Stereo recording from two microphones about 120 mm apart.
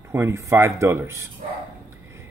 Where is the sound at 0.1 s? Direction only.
20° right (ahead or behind).